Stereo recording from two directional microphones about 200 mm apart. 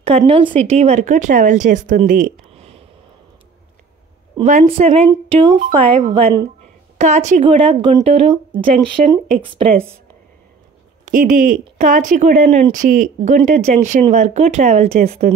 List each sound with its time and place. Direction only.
0.2 s speech: 25° right (ahead or behind)
2.5 s a sound: 30° right (ahead or behind)
4.5 s a woman's voice: 30° right (ahead or behind)
7.0 s a woman's voice: 35° right (ahead or behind)
11.1 s speech: 40° right (ahead or behind)